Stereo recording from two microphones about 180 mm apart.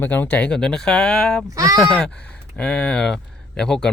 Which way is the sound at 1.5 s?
20° right (ahead or behind).